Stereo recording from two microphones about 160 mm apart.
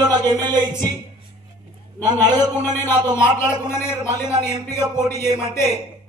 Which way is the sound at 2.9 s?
25° right (ahead or behind).